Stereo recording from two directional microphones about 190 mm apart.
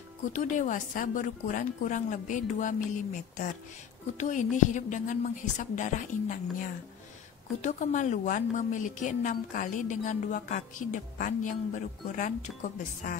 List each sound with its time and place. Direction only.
0.3 s speech: 40° left (ahead or behind)
4.2 s a woman's voice: 40° left (ahead or behind)